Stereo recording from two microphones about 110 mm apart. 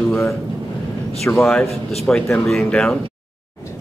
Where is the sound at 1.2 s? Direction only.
Centre (ahead or behind).